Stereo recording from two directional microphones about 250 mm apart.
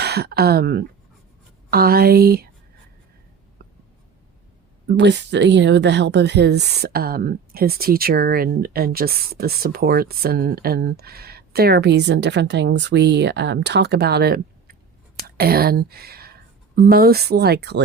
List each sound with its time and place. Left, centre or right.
0.0 s speech: right
4.9 s speech: right